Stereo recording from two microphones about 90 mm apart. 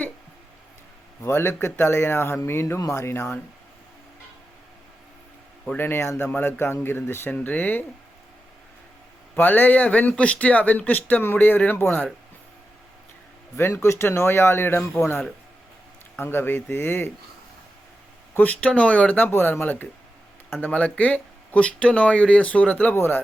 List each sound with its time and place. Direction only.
1.2 s speech: 30° left (ahead or behind)
5.7 s speech: 25° left (ahead or behind)
9.3 s speech: 20° left (ahead or behind)
13.6 s speech: 25° left (ahead or behind)
18.3 s speech: 20° left (ahead or behind)